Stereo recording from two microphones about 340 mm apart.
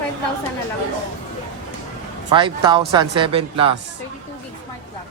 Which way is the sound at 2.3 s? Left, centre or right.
Centre.